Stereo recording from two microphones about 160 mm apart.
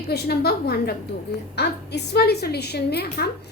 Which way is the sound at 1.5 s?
90° left.